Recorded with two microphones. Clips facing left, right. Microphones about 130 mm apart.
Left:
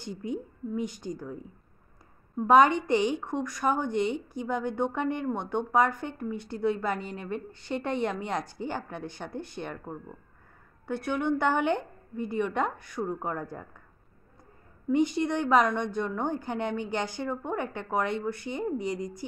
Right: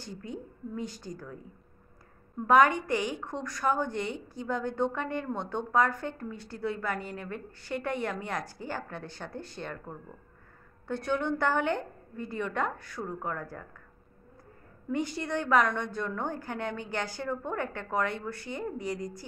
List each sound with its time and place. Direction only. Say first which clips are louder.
0.0 s a woman's voice: left 6 dB; 15° left (ahead or behind)
2.4 s a woman's voice: left 2 dB; 20° left (ahead or behind)
14.9 s a woman's voice: left 6 dB; 20° left (ahead or behind)